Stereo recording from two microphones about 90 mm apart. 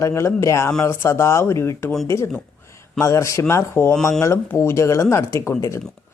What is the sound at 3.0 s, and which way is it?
Speech, 35° left (ahead or behind).